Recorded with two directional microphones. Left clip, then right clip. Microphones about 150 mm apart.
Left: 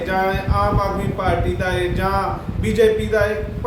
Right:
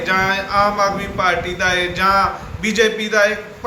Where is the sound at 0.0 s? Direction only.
30° left (ahead or behind).